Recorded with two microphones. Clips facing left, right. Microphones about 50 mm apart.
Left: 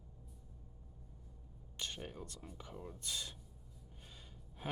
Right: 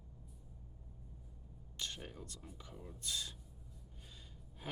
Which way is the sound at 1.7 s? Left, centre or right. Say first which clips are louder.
Even; centre.